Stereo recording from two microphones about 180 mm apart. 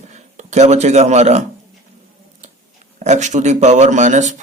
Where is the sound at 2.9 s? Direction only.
40° right (ahead or behind).